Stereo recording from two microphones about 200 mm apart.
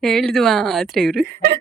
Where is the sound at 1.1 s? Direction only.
50° right (ahead or behind).